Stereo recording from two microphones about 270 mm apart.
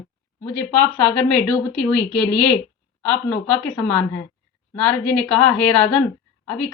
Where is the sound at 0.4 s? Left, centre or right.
Centre.